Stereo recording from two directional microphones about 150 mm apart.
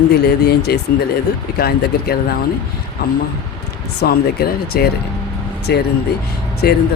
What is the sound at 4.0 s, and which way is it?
Speech, 90° left.